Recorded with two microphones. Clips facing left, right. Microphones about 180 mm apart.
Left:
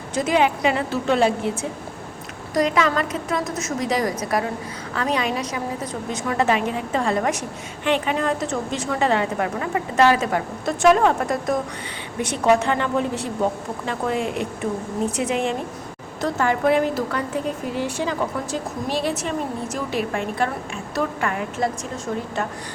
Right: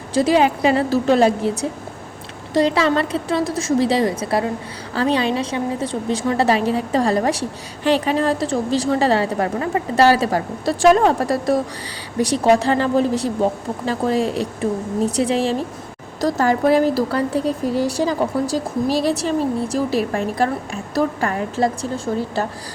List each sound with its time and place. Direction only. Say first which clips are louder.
0.1 s a woman's voice: right 4 dB; 35° right (ahead or behind)
2.5 s a woman's voice: right 3 dB; 30° right (ahead or behind)